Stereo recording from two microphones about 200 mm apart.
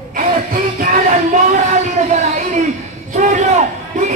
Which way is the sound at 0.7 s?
40° right (ahead or behind).